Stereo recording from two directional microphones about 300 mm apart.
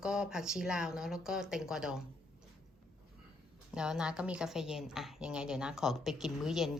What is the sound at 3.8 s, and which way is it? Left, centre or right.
Speech, centre.